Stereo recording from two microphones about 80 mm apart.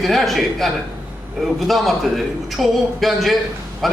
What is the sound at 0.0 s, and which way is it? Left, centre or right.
A man's voice, centre.